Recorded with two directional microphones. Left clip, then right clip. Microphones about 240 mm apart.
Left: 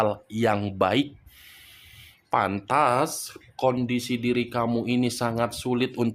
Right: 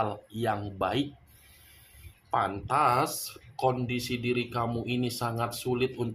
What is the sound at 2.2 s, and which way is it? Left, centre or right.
Speech, left.